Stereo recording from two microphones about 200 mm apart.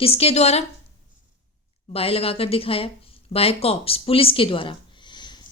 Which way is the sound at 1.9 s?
30° left (ahead or behind).